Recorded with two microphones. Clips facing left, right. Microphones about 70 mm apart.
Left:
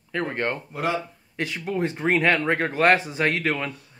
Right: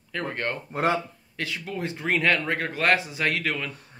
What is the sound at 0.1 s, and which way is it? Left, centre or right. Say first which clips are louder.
Speech: left 3 dB; left.